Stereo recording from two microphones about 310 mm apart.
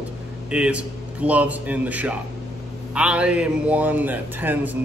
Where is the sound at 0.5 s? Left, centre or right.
Centre.